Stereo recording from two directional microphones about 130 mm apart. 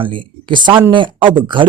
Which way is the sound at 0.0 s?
40° right (ahead or behind).